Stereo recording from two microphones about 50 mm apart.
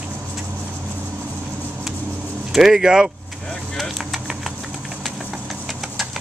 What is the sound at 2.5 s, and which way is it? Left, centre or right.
Speech, centre.